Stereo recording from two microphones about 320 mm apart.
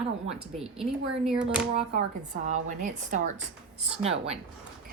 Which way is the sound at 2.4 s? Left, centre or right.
Right.